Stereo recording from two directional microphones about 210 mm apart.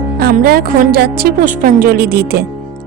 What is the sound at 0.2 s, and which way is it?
A woman's voice, 45° right (ahead or behind).